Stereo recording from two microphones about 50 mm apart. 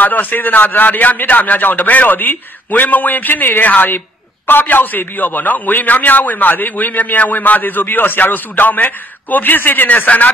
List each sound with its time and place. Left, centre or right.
0.0 s a man's voice: left